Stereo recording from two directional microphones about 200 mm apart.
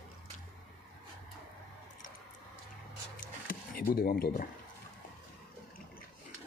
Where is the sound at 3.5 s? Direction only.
45° left (ahead or behind).